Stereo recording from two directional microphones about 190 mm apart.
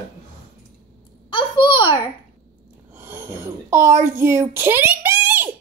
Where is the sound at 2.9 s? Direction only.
10° right (ahead or behind).